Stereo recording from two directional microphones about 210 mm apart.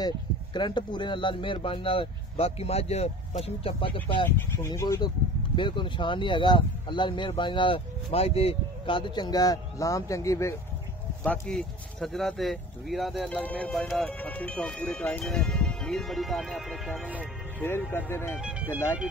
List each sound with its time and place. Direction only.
0.0 s speech: 20° left (ahead or behind)
11.2 s speech: 5° left (ahead or behind)
17.6 s speech: 10° left (ahead or behind)
18.4 s speech: 5° right (ahead or behind)